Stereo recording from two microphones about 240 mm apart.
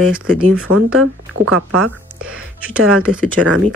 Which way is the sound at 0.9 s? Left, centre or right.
Right.